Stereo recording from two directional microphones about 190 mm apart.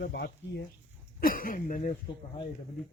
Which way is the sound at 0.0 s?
60° left (ahead or behind).